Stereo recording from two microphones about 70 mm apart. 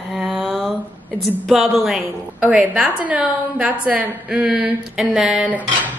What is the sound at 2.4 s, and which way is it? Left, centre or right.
A woman's voice, centre.